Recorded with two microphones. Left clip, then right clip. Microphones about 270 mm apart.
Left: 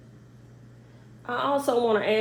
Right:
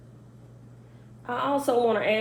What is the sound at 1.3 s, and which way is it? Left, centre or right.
Speech, left.